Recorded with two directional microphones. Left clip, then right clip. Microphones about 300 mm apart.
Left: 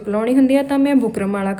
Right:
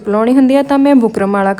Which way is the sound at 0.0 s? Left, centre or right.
Centre.